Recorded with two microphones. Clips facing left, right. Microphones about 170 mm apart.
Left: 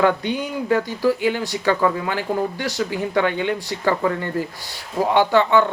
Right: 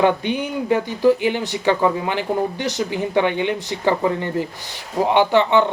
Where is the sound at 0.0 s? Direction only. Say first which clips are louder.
Right 1 dB; 20° right (ahead or behind).